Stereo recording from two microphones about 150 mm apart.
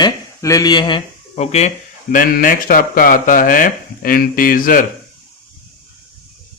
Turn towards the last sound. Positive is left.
turn(degrees=65)  # may be behind; listen again after turning